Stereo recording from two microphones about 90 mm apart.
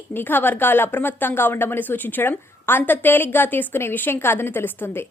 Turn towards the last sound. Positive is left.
turn(degrees=25)  # may be behind; listen again after turning